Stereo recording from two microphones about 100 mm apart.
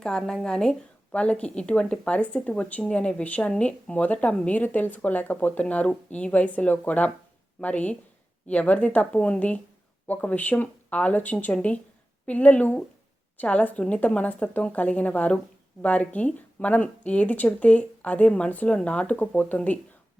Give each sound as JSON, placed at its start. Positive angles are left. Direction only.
{"t": 0.0, "sound": "a woman's voice", "side_deg": 5}